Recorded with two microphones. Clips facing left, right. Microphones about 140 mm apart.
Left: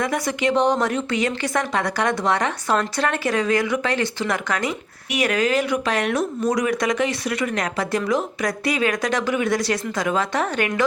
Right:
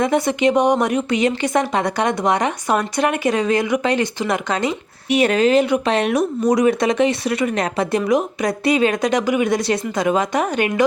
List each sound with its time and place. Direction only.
0.0 s speech: 25° right (ahead or behind)